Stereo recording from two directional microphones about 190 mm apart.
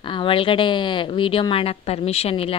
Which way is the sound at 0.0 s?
25° left (ahead or behind).